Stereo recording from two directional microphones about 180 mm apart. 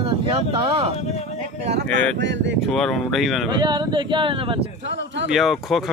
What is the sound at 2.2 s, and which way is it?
Speech, 85° right.